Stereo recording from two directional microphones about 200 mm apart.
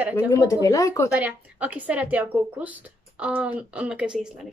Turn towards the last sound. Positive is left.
turn(degrees=-5)  # may be behind; listen again after turning